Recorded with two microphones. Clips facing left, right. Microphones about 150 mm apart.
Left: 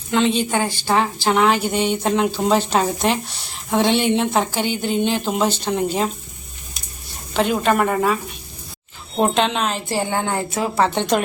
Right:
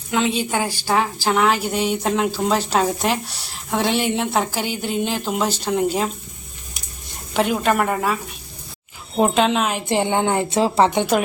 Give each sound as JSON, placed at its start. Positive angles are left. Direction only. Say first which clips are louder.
{"t": 0.1, "sound": "a woman's voice", "louder": "left 2 dB", "side_deg": -5}
{"t": 7.3, "sound": "a woman's voice", "louder": "left 1 dB", "side_deg": -5}
{"t": 9.1, "sound": "a woman's voice", "louder": "right 1 dB", "side_deg": -5}
{"t": 9.7, "sound": "a woman's voice", "louder": "right 3 dB", "side_deg": -20}